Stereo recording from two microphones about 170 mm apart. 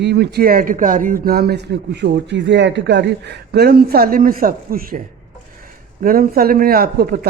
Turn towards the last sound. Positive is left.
turn(degrees=-60)  # may be behind; listen again after turning